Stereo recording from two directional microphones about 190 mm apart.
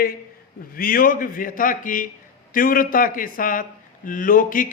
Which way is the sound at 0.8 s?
50° left (ahead or behind).